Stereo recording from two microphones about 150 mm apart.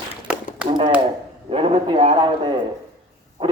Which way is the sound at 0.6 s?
35° right (ahead or behind).